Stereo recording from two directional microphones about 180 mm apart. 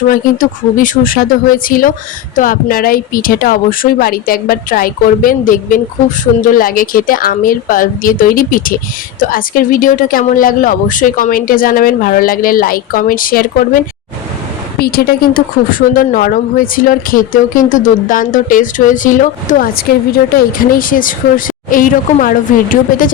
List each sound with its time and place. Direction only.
0.1 s speech: 50° left (ahead or behind)